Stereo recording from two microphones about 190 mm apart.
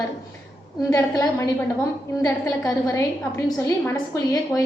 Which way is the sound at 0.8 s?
15° left (ahead or behind).